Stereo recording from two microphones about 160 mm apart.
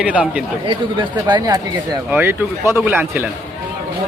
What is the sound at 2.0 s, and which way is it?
A man's voice, 10° right (ahead or behind).